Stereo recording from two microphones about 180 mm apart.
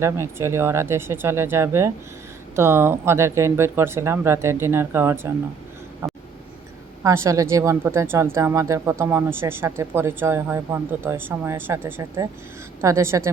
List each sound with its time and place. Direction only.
0.0 s speech: 15° right (ahead or behind)
7.0 s speech: 15° right (ahead or behind)